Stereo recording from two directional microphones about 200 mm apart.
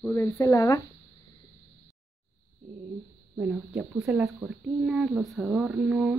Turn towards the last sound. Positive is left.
turn(degrees=-5)  # may be behind; listen again after turning